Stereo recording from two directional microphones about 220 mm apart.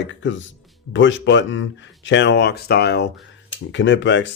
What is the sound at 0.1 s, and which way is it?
Speech, 55° left (ahead or behind).